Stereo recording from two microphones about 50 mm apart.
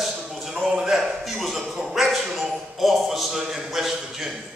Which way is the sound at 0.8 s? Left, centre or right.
Centre.